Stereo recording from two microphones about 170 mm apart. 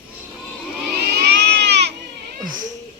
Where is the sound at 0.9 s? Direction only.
75° right (ahead or behind).